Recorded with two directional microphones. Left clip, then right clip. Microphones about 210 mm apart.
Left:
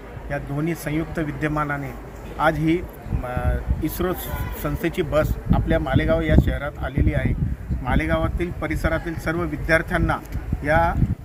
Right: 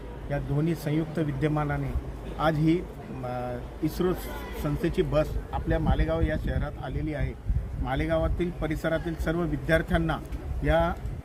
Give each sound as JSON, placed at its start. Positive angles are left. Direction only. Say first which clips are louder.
{"t": 0.3, "sound": "speech", "louder": "left 3 dB", "side_deg": 0}
{"t": 7.9, "sound": "speech", "louder": "left 4 dB", "side_deg": 5}